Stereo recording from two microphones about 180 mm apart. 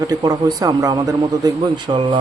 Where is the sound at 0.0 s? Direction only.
20° right (ahead or behind).